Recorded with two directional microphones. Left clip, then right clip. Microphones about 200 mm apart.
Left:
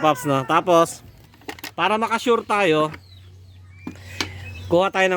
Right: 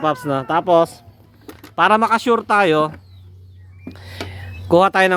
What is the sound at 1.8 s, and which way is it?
Speech, 10° right (ahead or behind).